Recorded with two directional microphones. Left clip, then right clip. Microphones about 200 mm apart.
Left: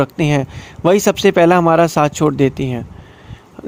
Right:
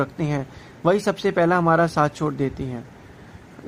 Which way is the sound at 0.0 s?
45° left (ahead or behind).